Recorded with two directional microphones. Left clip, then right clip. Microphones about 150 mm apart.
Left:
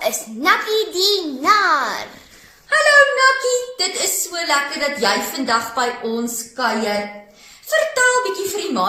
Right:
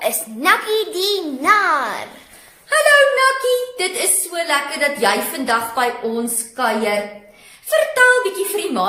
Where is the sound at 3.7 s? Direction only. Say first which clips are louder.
Even; 15° right (ahead or behind).